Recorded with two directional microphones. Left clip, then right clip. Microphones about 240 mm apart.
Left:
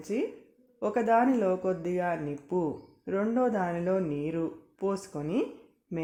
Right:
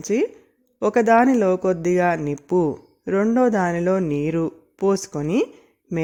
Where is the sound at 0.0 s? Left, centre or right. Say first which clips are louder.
Right 10 dB; right.